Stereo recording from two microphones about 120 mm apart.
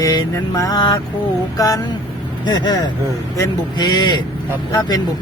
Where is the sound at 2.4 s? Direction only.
35° left (ahead or behind).